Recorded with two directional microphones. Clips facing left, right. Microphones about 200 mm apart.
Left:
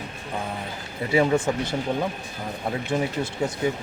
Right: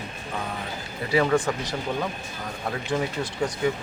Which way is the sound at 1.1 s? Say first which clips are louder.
Left 1 dB; 25° left (ahead or behind).